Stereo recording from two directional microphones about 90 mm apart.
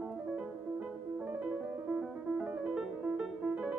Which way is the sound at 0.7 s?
15° right (ahead or behind).